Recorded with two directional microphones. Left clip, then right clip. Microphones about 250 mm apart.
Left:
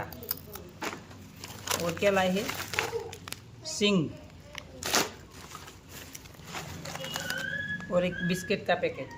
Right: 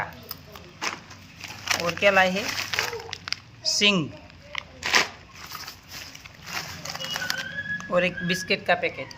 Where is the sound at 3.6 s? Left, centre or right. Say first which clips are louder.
Right 7 dB; centre.